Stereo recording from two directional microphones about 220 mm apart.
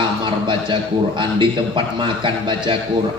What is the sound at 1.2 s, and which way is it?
A man's voice, 20° right (ahead or behind).